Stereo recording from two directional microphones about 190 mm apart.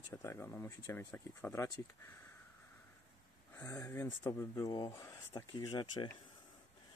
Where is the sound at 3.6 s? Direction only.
15° left (ahead or behind).